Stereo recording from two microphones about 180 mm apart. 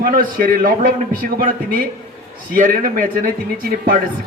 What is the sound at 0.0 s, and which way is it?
A man's voice, 50° right (ahead or behind).